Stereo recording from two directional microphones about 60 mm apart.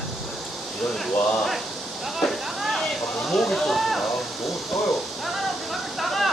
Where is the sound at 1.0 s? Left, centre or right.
Centre.